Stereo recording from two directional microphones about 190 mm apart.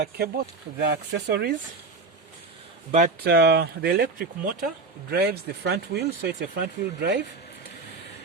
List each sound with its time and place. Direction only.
0.0 s speech: 55° right (ahead or behind)
3.2 s speech: 60° right (ahead or behind)